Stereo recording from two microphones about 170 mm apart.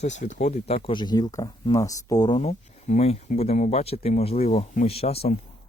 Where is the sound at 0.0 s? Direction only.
45° left (ahead or behind); by 2.4 s 25° left (ahead or behind).